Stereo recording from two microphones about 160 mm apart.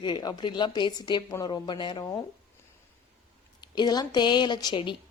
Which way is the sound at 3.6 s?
25° left (ahead or behind).